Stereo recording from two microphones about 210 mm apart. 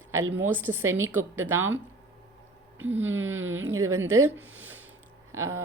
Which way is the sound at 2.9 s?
10° right (ahead or behind).